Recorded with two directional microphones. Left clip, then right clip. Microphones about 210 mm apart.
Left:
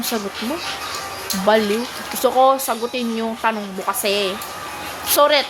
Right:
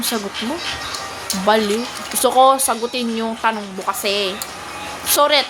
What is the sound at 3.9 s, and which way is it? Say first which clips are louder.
A woman's voice: even; 10° left (ahead or behind).